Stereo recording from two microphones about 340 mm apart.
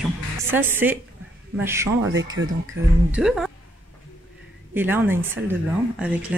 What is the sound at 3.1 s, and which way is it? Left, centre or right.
Speech, centre.